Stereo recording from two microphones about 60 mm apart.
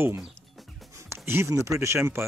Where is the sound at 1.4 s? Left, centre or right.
Right.